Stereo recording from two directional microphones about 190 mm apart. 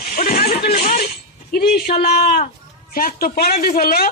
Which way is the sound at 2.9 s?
50° left (ahead or behind).